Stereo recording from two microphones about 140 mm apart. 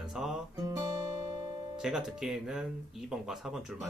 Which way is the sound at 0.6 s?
25° right (ahead or behind).